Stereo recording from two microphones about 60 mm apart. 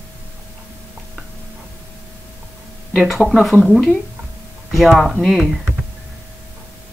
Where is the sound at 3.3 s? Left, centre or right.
Centre.